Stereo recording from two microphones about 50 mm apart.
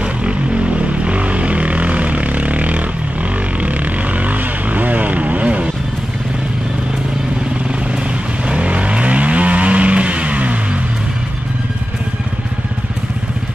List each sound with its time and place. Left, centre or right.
0.0 s vehicle: right
8.5 s vehicle: right